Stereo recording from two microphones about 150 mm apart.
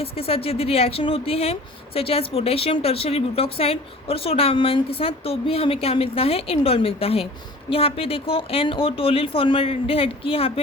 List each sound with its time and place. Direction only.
0.0 s a woman's voice: 40° left (ahead or behind)